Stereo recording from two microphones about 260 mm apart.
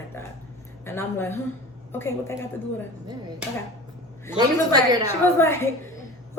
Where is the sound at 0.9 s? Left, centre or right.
Centre.